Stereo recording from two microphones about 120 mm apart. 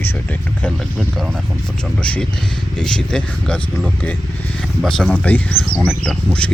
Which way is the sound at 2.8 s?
5° left (ahead or behind).